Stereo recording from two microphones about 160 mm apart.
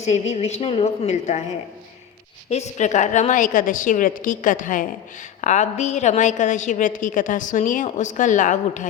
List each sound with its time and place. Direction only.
0.0 s a woman's voice: 45° left (ahead or behind)
2.5 s a woman's voice: 45° left (ahead or behind)